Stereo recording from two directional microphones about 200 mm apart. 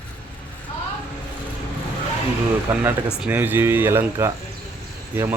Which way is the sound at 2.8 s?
10° right (ahead or behind).